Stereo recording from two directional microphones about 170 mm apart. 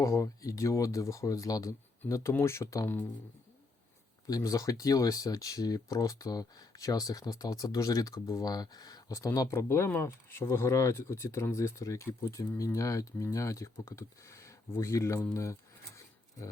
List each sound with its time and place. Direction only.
0.0 s speech: 20° left (ahead or behind)
4.3 s speech: 20° left (ahead or behind)